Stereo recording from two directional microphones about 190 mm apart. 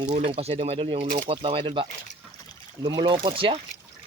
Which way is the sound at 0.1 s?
30° right (ahead or behind).